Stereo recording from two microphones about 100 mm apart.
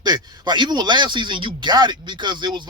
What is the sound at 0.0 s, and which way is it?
Speech, 45° right (ahead or behind).